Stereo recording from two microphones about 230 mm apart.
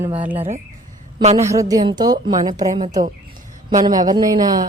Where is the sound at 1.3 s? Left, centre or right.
Centre.